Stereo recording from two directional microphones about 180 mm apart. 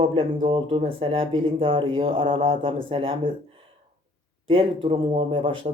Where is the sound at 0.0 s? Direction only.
30° right (ahead or behind).